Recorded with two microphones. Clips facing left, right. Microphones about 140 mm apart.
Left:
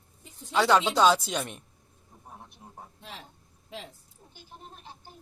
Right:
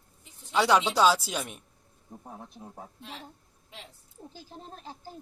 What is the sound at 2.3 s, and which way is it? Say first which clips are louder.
Speech: right 3 dB; 80° right.